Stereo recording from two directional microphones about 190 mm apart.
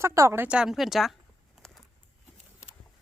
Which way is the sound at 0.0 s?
15° right (ahead or behind).